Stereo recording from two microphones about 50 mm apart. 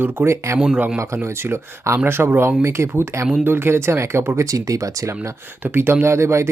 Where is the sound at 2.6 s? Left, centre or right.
Right.